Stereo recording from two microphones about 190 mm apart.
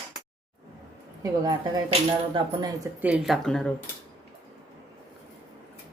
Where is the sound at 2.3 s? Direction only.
20° right (ahead or behind).